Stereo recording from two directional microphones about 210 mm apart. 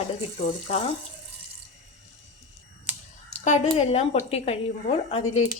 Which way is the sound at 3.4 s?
35° left (ahead or behind).